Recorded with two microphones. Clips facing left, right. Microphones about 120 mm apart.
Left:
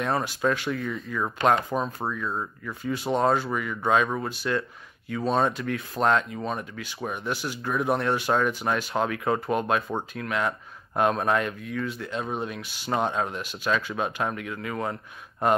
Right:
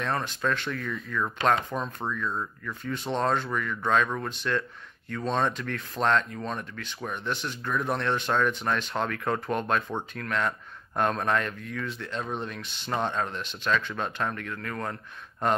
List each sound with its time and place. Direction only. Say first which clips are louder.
0.0 s speech: left 4 dB; 10° left (ahead or behind)